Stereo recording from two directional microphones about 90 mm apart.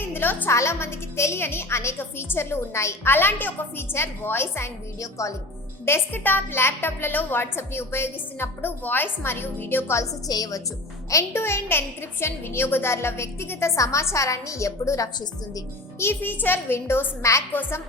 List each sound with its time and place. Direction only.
0.0 s music: 25° left (ahead or behind)
0.5 s a woman's voice: 30° left (ahead or behind)
5.8 s a woman's voice: 25° left (ahead or behind)
10.2 s a woman's voice: 45° left (ahead or behind)
11.1 s a woman's voice: 30° left (ahead or behind)
16.0 s a woman's voice: 25° left (ahead or behind)